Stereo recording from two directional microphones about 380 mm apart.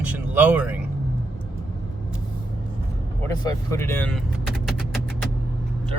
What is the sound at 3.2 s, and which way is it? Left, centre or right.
Vehicle, centre.